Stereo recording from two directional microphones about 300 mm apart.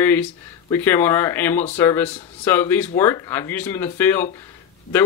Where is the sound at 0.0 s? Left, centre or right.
Centre.